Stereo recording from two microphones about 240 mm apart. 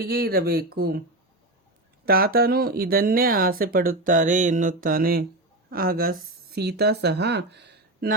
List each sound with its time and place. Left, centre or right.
0.0 s speech: right
2.0 s speech: right